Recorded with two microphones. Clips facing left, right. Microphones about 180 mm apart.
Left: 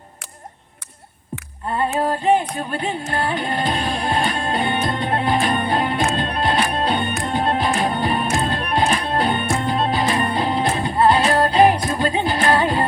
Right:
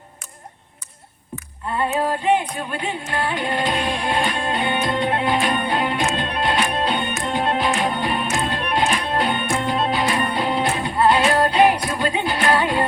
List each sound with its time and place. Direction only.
1.7 s music: 40° left (ahead or behind)